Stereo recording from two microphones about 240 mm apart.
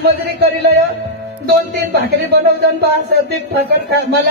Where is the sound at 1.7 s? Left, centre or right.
Right.